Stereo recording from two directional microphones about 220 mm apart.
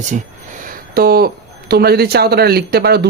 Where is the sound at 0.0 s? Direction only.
35° right (ahead or behind).